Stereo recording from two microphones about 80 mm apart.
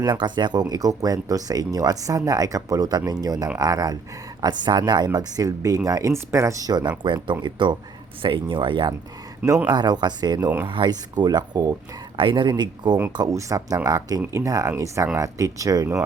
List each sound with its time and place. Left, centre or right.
0.0 s speech: right
0.7 s speech: right
4.4 s speech: right
7.0 s speech: right
7.4 s speech: right
8.2 s speech: right
9.6 s speech: right
10.7 s speech: right
12.1 s speech: right
13.3 s speech: right